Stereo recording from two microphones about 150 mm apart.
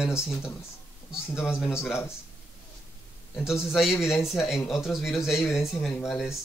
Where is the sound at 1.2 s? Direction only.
15° left (ahead or behind).